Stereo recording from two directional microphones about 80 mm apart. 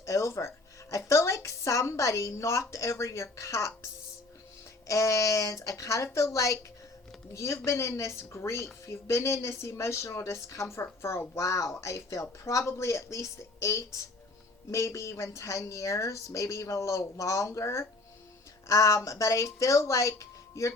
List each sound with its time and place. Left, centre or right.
0.0 s a woman's voice: left
4.9 s a woman's voice: left